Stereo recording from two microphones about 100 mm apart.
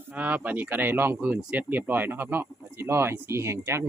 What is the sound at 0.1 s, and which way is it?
Speech, 15° right (ahead or behind).